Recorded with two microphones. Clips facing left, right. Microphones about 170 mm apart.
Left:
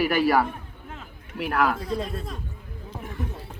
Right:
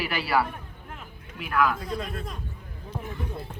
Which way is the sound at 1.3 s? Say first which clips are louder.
Left 1 dB; 65° left (ahead or behind).